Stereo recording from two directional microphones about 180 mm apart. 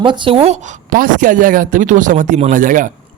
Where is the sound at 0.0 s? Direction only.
25° right (ahead or behind).